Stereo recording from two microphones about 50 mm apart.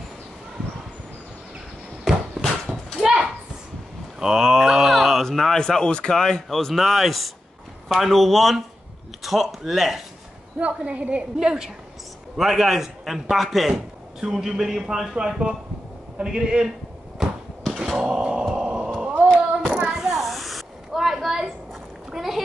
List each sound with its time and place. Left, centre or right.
2.1 s a sound: centre
3.0 s a sound: centre
4.2 s a man's voice: centre
10.6 s a woman's voice: right
11.3 s a man's voice: centre
17.2 s a sound: centre
19.2 s child singing: left
19.7 s snake: centre
22.1 s rowboat: centre